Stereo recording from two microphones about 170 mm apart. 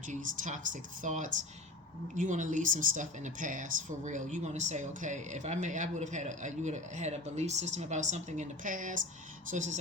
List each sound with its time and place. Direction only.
0.1 s speech: 50° right (ahead or behind)